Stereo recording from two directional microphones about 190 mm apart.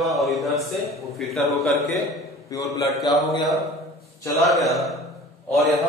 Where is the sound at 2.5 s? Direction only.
15° left (ahead or behind).